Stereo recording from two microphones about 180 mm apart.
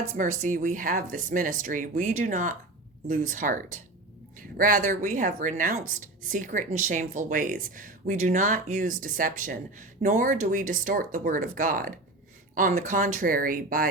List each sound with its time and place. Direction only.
0.1 s a woman's voice: 45° right (ahead or behind)